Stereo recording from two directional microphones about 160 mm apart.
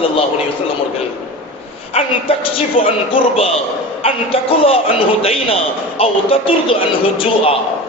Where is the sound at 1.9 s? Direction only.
35° left (ahead or behind).